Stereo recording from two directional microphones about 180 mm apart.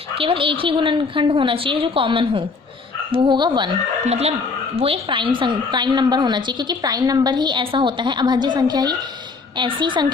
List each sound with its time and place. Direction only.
0.2 s a woman's voice: 30° right (ahead or behind)
4.0 s a woman's voice: 35° right (ahead or behind)